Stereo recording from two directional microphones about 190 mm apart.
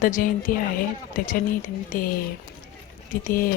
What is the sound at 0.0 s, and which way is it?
A woman's voice, 45° left (ahead or behind).